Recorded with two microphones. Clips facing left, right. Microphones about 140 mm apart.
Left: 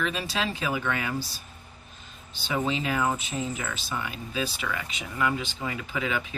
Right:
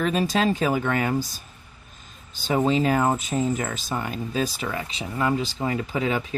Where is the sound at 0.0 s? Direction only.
45° right (ahead or behind).